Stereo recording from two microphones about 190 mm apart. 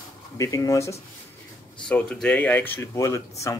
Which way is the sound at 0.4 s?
15° left (ahead or behind).